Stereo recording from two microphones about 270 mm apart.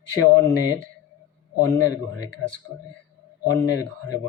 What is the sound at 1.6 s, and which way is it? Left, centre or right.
A man's voice, right.